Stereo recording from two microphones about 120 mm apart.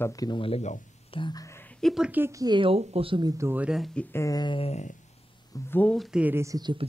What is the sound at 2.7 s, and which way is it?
Speech, 55° right (ahead or behind).